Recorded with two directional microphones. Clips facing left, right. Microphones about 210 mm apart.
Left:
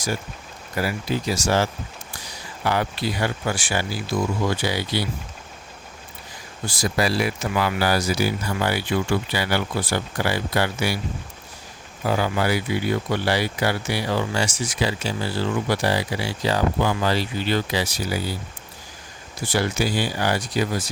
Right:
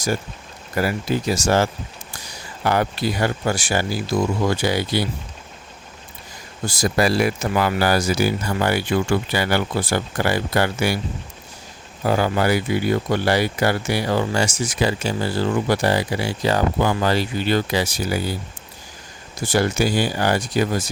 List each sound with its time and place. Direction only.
0.8 s speech: 50° right (ahead or behind)
6.7 s speech: 45° right (ahead or behind)
12.0 s speech: 45° right (ahead or behind)
19.5 s speech: 45° right (ahead or behind)